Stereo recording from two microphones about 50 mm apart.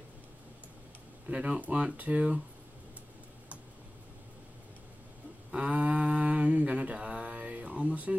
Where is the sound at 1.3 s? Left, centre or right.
Right.